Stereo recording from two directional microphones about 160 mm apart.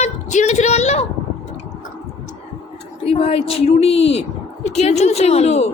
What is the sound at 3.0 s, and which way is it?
A woman's voice, 35° left (ahead or behind).